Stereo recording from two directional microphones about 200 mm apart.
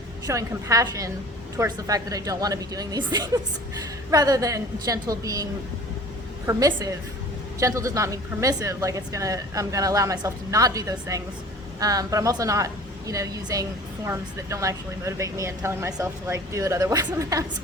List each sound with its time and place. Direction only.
0.3 s a woman's voice: 15° right (ahead or behind)